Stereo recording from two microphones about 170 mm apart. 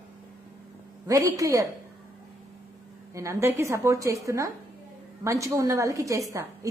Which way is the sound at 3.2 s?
15° right (ahead or behind).